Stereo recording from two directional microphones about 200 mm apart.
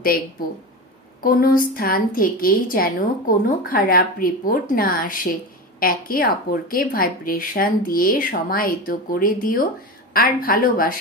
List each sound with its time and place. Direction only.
1.2 s a woman's voice: 45° left (ahead or behind)